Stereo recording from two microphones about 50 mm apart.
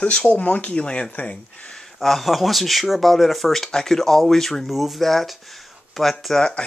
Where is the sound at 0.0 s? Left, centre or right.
Left.